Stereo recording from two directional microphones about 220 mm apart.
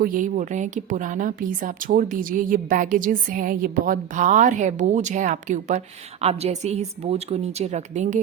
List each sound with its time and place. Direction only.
0.0 s a woman's voice: 40° right (ahead or behind)